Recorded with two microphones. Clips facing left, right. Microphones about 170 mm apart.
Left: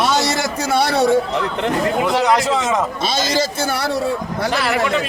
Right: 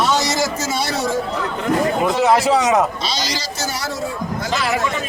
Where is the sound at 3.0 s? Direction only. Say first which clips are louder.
Left 6 dB; 50° left (ahead or behind).